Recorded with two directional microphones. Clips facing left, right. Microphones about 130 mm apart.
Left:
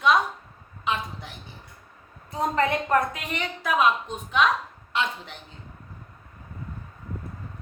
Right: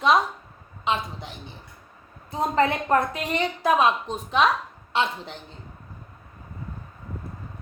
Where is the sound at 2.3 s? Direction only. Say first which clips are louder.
Right 2 dB; 30° right (ahead or behind).